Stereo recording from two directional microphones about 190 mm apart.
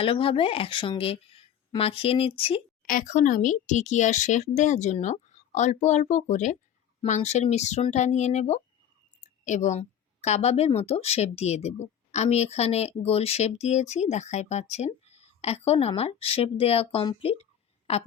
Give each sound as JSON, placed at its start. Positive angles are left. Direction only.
{"t": 0.0, "sound": "speech", "side_deg": 30}
{"t": 2.8, "sound": "a woman's voice", "side_deg": 45}